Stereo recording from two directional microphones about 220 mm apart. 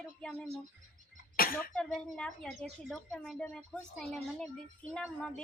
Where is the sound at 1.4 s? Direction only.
40° left (ahead or behind).